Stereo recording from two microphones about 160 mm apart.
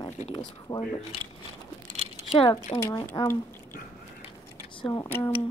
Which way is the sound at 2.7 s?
25° left (ahead or behind).